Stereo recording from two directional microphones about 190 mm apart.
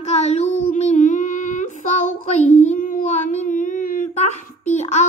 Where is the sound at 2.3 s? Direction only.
35° left (ahead or behind).